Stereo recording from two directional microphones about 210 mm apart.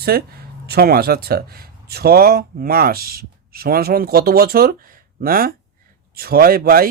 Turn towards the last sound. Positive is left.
turn(degrees=-45)  # may be behind; listen again after turning